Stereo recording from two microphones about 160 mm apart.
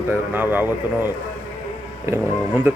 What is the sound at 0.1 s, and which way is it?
Speech, 10° right (ahead or behind).